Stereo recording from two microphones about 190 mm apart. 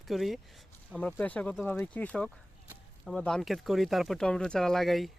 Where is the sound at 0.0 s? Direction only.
Centre (ahead or behind).